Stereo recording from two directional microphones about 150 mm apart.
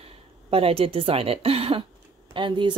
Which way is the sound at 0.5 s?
40° right (ahead or behind).